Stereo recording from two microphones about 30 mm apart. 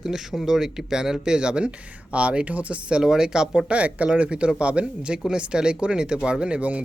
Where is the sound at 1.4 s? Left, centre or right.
Right.